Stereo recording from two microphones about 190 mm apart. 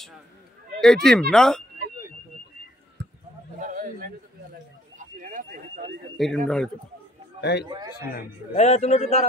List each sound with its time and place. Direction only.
0.7 s speech: 5° left (ahead or behind)
3.5 s a sound: 45° right (ahead or behind)
6.1 s speech: 5° left (ahead or behind)
7.3 s a man's voice: 60° left (ahead or behind)
7.6 s a man's voice: 25° right (ahead or behind)
8.5 s a man's voice: 35° left (ahead or behind)